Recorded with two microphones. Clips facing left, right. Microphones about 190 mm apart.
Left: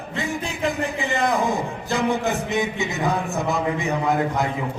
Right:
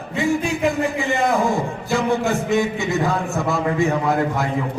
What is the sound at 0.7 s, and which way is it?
A man's voice, 15° left (ahead or behind).